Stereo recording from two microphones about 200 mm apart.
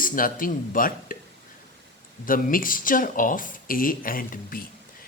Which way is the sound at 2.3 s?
45° left (ahead or behind).